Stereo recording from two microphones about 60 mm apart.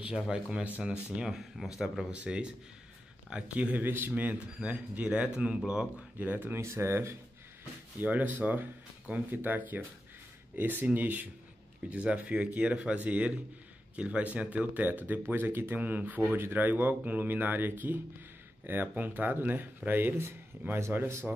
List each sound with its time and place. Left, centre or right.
0.3 s speech: centre
1.0 s speech: centre
6.1 s speech: right
6.5 s speech: right
8.0 s speech: right